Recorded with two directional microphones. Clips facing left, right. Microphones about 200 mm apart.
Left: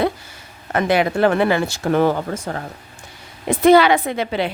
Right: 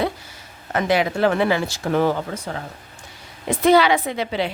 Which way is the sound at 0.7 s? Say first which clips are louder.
Left 2 dB; 55° left (ahead or behind).